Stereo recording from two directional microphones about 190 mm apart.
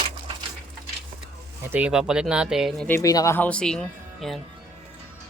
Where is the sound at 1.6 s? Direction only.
10° right (ahead or behind).